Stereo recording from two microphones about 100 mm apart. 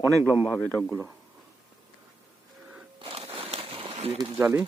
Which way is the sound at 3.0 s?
70° right (ahead or behind).